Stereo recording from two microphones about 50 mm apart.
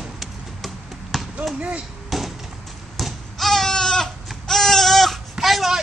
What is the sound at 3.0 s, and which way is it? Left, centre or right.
Goat, centre.